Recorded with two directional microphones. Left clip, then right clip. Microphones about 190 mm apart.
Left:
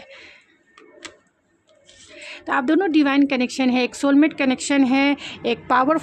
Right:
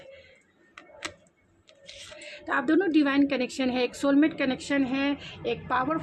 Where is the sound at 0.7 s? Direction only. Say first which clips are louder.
Right 1 dB; 15° right (ahead or behind).